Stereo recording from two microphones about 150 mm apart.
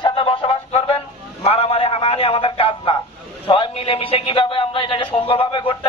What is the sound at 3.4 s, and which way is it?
Speech, 35° left (ahead or behind).